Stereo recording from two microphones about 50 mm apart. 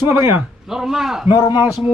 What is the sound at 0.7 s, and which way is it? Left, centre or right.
Speech, centre.